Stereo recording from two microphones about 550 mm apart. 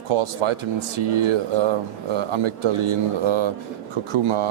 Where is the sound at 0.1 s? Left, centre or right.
Right.